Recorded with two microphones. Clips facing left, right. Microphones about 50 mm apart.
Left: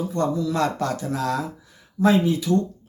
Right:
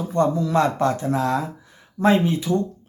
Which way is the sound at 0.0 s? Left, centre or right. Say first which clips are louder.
Right 3 dB; right.